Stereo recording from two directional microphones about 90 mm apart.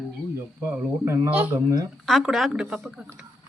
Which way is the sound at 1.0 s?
35° right (ahead or behind).